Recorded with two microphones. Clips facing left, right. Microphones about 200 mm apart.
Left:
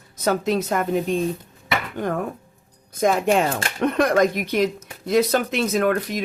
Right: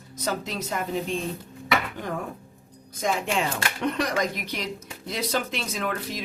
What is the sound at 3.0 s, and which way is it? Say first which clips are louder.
Speech: left 8 dB; 55° left (ahead or behind).